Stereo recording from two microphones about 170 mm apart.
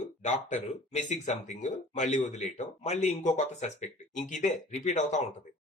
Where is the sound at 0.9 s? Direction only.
45° left (ahead or behind).